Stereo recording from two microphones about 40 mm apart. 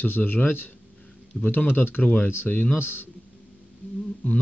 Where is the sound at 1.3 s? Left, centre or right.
Centre.